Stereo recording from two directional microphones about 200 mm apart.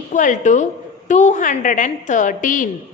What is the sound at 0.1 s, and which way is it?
A woman's voice, 40° left (ahead or behind).